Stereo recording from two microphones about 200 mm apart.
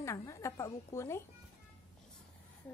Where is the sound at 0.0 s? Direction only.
15° left (ahead or behind).